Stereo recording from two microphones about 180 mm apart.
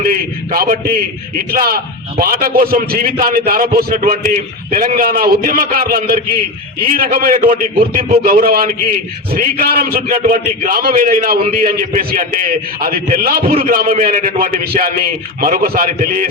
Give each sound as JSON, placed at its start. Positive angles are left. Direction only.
{"t": 0.0, "sound": "a man's voice", "side_deg": -55}